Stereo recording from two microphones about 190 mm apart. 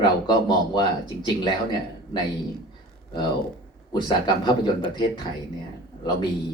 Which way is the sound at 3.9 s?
25° left (ahead or behind).